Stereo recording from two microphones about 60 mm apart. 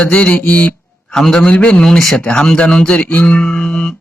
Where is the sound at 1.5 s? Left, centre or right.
Centre.